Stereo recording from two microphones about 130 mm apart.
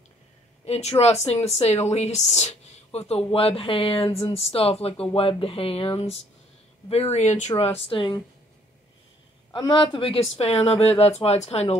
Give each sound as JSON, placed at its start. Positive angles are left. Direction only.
{"t": 0.7, "sound": "speech", "side_deg": 55}
{"t": 9.6, "sound": "speech", "side_deg": 35}